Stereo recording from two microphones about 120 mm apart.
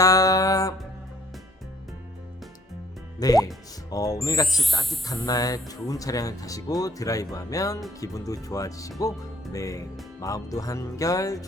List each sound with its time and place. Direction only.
0.0 s music: 30° left (ahead or behind)
3.2 s speech: 30° left (ahead or behind)
4.4 s speech: centre (ahead or behind)
5.0 s speech: 30° left (ahead or behind)